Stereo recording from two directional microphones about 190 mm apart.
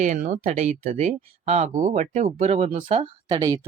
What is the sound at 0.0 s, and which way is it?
Speech, 40° right (ahead or behind).